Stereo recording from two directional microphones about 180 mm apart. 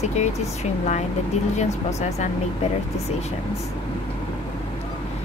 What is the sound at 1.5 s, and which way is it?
Speech, 40° left (ahead or behind).